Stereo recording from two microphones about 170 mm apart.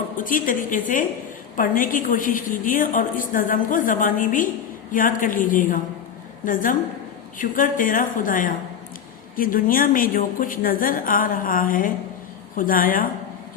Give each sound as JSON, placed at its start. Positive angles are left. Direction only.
{"t": 0.2, "sound": "a woman's voice", "side_deg": 50}